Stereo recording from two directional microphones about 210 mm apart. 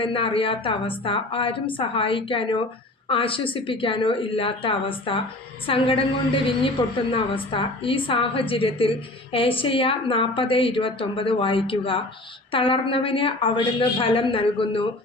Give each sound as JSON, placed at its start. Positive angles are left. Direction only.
{"t": 0.0, "sound": "a woman's voice", "side_deg": 25}